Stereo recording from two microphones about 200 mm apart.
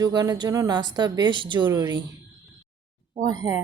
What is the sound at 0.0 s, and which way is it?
A woman's voice, 20° right (ahead or behind).